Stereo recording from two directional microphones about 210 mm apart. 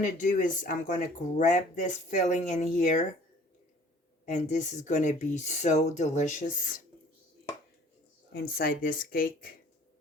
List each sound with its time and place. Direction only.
0.0 s speech: 35° left (ahead or behind)
4.3 s speech: 35° left (ahead or behind)
8.3 s speech: 45° left (ahead or behind)